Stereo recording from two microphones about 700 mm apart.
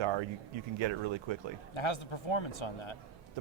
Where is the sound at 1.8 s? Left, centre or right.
Left.